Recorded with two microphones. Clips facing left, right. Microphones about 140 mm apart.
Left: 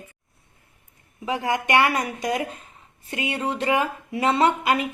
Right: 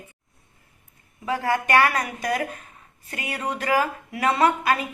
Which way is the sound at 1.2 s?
20° left (ahead or behind).